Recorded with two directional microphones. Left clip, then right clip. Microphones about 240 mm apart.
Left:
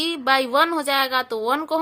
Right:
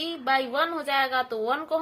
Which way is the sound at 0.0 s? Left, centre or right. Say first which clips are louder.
Left 6 dB; left.